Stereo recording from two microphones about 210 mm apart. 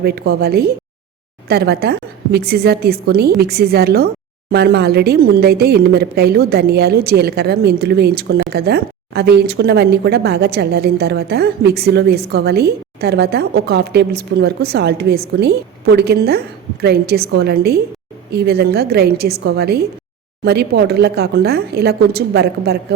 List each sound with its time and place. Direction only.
0.0 s a woman's voice: 50° right (ahead or behind)